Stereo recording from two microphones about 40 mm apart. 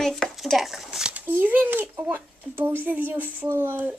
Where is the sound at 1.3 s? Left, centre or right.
Right.